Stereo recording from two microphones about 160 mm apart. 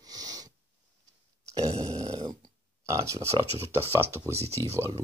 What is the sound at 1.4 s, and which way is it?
Grunt, 20° right (ahead or behind).